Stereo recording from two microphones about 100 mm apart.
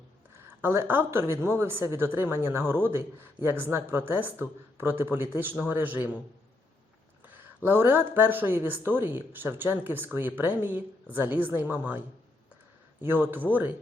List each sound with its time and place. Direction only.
0.3 s a woman's voice: 25° right (ahead or behind)
7.3 s a sound: 20° right (ahead or behind)
8.1 s a woman's voice: 20° right (ahead or behind)